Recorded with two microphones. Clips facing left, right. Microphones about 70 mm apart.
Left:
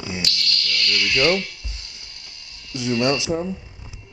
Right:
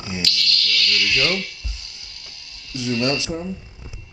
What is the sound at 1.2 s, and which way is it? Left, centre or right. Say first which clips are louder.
Speech: left 7 dB; left.